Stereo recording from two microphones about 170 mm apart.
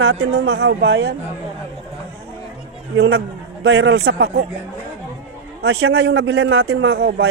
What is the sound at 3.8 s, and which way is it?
Speech, 80° right.